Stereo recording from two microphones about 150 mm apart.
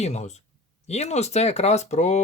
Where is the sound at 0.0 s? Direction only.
50° left (ahead or behind).